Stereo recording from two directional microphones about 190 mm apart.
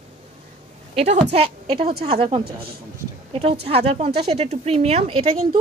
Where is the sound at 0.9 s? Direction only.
35° right (ahead or behind).